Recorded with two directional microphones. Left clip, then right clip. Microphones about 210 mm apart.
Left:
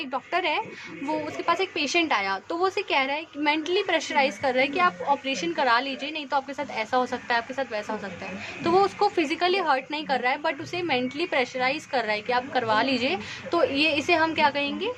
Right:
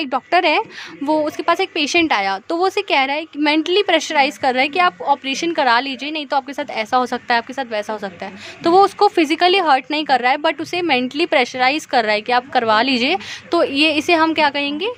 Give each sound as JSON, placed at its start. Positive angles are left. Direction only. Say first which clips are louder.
{"t": 0.0, "sound": "a woman's voice", "louder": "right 11 dB", "side_deg": -50}